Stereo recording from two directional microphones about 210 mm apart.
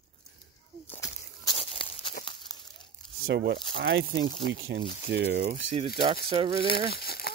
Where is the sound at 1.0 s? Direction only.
25° left (ahead or behind).